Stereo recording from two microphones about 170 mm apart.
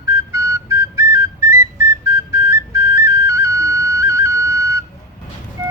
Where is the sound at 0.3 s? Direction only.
15° right (ahead or behind).